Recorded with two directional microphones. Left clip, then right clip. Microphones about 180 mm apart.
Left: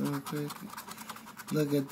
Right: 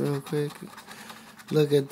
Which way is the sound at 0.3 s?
60° right (ahead or behind).